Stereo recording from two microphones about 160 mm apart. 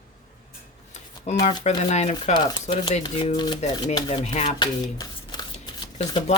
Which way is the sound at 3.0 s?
25° left (ahead or behind).